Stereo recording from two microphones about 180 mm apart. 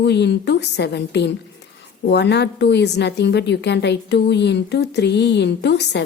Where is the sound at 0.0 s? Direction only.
70° left (ahead or behind).